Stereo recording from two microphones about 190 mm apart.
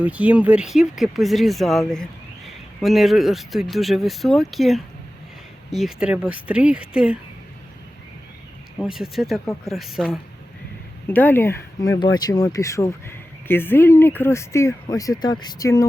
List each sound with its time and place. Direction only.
0.0 s speech: 5° right (ahead or behind)
8.8 s speech: centre (ahead or behind)
11.1 s speech: 10° left (ahead or behind)